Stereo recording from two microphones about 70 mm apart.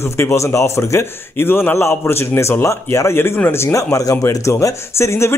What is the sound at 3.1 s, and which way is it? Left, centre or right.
A man's voice, left.